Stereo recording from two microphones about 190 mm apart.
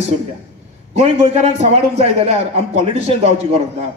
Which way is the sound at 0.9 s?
35° right (ahead or behind).